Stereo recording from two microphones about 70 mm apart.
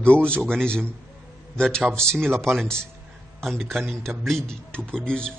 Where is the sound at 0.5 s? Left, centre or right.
Centre.